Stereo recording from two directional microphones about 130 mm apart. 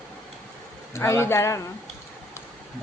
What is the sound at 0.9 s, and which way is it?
Speech, 20° left (ahead or behind).